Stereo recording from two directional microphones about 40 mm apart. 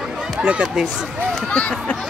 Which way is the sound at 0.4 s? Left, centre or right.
Right.